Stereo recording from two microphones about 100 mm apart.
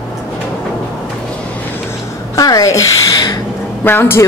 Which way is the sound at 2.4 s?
35° left (ahead or behind).